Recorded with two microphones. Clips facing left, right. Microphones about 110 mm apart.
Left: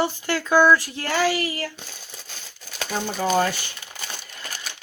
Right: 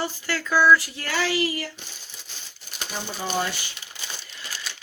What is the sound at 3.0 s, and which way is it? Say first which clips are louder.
Speech: left 6 dB; 50° left (ahead or behind).